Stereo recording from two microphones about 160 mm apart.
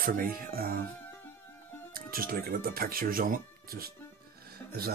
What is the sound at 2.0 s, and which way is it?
Speech, 65° right (ahead or behind).